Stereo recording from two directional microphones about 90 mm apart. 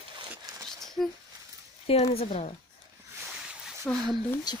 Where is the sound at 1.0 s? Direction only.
5° left (ahead or behind).